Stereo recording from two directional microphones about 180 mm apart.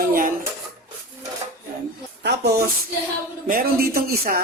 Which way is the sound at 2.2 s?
65° right (ahead or behind).